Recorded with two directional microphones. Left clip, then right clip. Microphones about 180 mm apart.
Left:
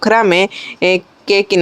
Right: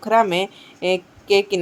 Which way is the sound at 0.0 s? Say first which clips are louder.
Left 6 dB; 35° left (ahead or behind).